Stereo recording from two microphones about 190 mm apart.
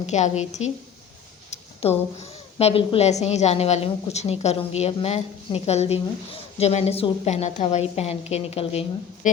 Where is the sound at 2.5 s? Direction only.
30° left (ahead or behind).